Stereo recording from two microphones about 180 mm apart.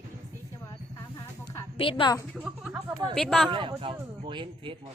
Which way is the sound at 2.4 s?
5° right (ahead or behind).